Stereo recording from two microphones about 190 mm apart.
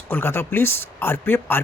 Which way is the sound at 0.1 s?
10° left (ahead or behind).